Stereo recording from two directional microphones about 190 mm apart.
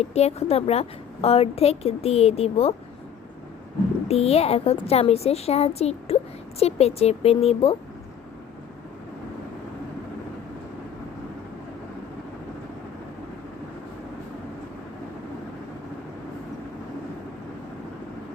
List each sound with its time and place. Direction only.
0.0 s a woman's voice: 35° left (ahead or behind)
4.1 s a woman's voice: 30° left (ahead or behind)